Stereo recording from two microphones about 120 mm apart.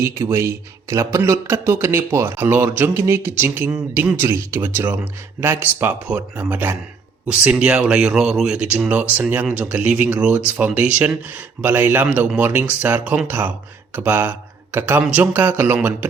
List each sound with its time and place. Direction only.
0.0 s speech: 25° right (ahead or behind)